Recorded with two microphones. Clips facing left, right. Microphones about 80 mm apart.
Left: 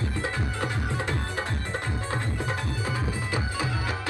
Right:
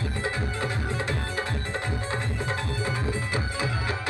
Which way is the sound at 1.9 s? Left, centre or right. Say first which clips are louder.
Right 1 dB; right.